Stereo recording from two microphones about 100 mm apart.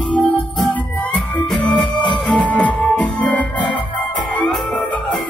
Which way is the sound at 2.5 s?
10° left (ahead or behind).